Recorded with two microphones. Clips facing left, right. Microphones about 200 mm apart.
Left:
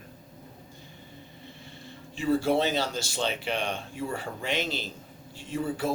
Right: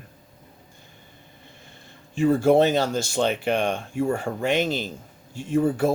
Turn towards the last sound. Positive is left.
turn(degrees=-50)  # may be behind; listen again after turning